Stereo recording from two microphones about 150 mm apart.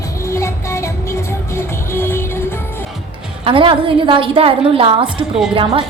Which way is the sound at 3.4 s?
35° right (ahead or behind).